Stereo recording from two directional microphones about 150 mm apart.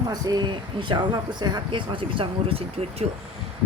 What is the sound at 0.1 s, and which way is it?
Speech, 25° right (ahead or behind).